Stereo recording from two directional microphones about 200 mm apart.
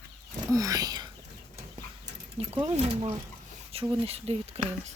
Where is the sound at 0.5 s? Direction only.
15° right (ahead or behind).